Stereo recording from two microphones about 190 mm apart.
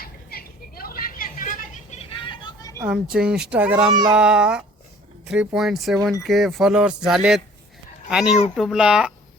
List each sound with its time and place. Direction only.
0.0 s a sound: 55° left (ahead or behind)
2.0 s vehicle: 25° left (ahead or behind)
2.7 s speech: 5° right (ahead or behind)